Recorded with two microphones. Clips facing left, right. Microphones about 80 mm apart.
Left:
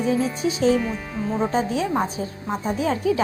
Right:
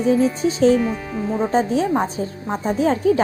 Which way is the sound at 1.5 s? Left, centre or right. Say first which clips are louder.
Right 4 dB; right.